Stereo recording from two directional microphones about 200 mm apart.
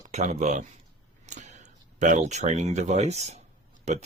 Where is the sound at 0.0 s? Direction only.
35° right (ahead or behind).